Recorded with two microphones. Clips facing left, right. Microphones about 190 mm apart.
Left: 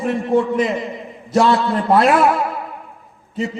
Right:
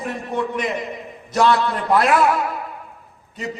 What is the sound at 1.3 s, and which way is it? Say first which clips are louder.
Speech: left 3 dB; 30° left (ahead or behind).